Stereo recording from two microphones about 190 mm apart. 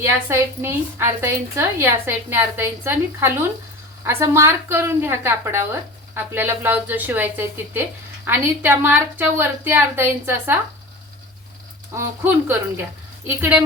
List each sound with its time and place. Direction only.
0.0 s a woman's voice: 15° right (ahead or behind)
11.9 s a woman's voice: 10° right (ahead or behind)